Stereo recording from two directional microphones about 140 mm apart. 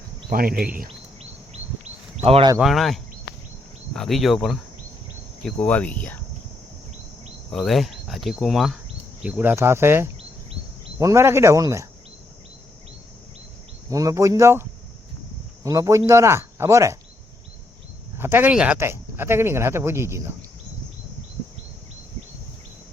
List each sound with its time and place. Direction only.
0.3 s speech: 90° right
0.9 s a sound: 50° right (ahead or behind)
2.2 s speech: 45° right (ahead or behind)
2.6 s speech: centre (ahead or behind)
5.5 s cricket: 10° left (ahead or behind)
7.5 s speech: centre (ahead or behind); by 10.1 s 15° right (ahead or behind)
10.2 s chirp: 45° right (ahead or behind)
11.0 s speech: 20° right (ahead or behind)
13.9 s speech: 25° right (ahead or behind)
18.2 s speech: 15° right (ahead or behind)